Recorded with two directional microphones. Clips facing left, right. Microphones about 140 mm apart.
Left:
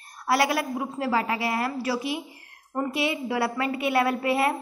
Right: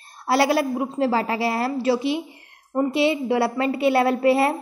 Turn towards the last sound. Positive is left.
turn(degrees=-30)  # may be behind; listen again after turning